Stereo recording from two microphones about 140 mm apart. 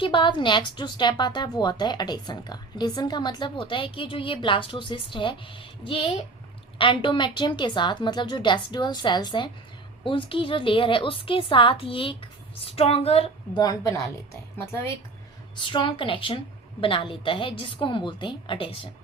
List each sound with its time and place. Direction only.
0.0 s a woman's voice: 35° left (ahead or behind)
13.6 s a woman's voice: 25° left (ahead or behind)
15.5 s a woman's voice: 35° left (ahead or behind)